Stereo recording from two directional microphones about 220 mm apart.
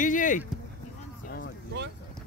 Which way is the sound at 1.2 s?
45° left (ahead or behind).